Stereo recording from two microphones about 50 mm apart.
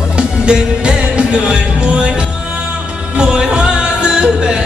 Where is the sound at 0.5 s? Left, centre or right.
Centre.